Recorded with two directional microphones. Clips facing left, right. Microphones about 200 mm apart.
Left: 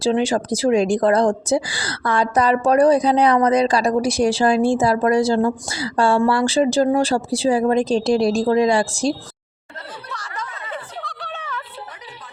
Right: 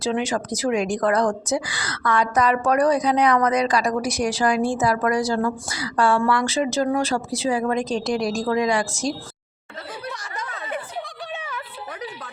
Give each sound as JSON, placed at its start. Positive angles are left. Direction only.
{"t": 0.0, "sound": "a woman's voice", "side_deg": 30}
{"t": 10.1, "sound": "snicker", "side_deg": -20}
{"t": 10.7, "sound": "a sound", "side_deg": -15}